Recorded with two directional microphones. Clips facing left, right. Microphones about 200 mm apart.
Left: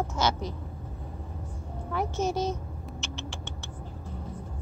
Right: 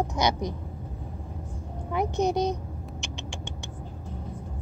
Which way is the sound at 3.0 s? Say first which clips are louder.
Left 1 dB; 15° right (ahead or behind).